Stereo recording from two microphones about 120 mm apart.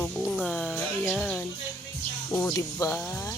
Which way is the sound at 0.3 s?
5° left (ahead or behind).